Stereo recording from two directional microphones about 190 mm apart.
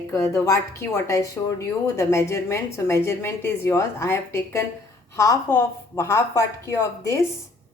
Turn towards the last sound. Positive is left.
turn(degrees=15)  # may be behind; listen again after turning